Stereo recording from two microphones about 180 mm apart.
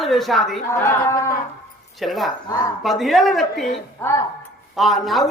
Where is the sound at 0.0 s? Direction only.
Centre (ahead or behind).